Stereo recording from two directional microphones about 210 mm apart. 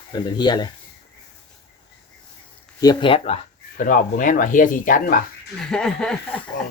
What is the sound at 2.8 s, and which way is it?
Speech, 20° left (ahead or behind).